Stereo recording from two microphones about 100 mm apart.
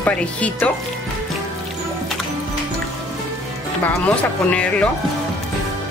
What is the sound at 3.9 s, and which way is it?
Speech, 10° left (ahead or behind).